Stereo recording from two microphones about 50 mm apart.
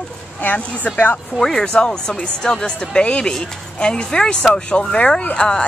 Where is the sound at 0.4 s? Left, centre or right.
Left.